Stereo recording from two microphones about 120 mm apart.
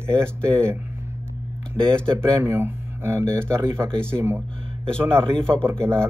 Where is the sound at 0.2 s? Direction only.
10° left (ahead or behind).